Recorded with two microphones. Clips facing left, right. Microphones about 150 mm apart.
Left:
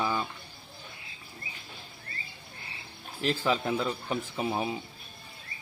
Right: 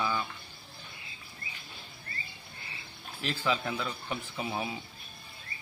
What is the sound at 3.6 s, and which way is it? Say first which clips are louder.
Speech: left 5 dB; 25° left (ahead or behind).